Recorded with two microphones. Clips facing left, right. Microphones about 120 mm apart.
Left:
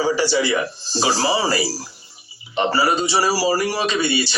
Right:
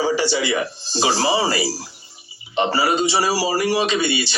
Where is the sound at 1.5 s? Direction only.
35° left (ahead or behind).